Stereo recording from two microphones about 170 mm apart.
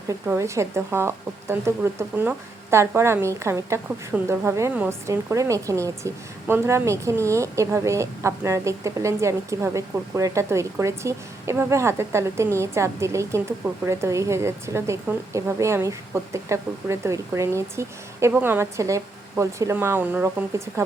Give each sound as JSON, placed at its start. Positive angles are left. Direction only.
{"t": 0.1, "sound": "speech", "side_deg": -15}